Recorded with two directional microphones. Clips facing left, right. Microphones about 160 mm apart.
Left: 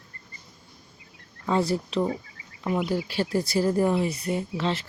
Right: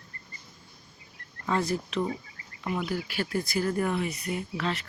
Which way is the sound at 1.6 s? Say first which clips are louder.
Left 4 dB; 30° left (ahead or behind).